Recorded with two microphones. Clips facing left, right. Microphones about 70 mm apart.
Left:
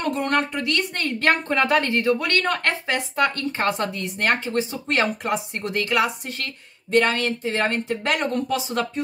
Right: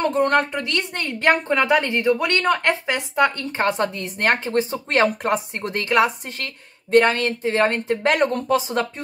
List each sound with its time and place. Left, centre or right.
0.0 s a woman's voice: right
1.0 s a woman's voice: centre; by 9.0 s right